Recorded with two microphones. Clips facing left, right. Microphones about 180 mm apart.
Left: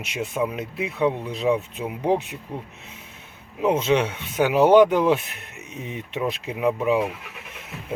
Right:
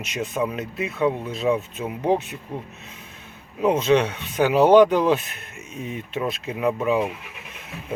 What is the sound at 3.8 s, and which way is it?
Speech, 10° left (ahead or behind).